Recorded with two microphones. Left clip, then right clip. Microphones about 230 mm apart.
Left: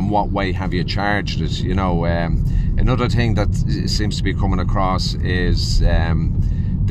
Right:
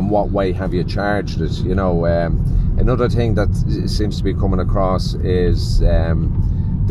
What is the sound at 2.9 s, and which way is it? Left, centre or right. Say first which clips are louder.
Speech: right 3 dB; left.